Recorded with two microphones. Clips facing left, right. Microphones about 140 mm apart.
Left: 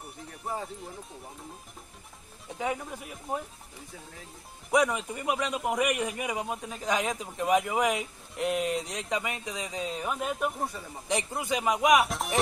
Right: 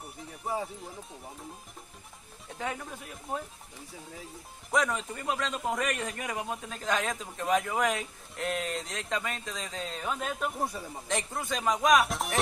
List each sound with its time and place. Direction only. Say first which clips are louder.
0.0 s speech: even; centre (ahead or behind)
2.4 s speech: left 4 dB; 5° left (ahead or behind)
4.7 s speech: left 4 dB; 15° left (ahead or behind)
6.2 s speech: left 2 dB; 5° left (ahead or behind)
9.8 s speech: left 2 dB; 5° left (ahead or behind)
10.6 s speech: right 1 dB; 10° right (ahead or behind)
11.1 s speech: left 3 dB; 15° left (ahead or behind)
12.0 s speech: left 1 dB; centre (ahead or behind)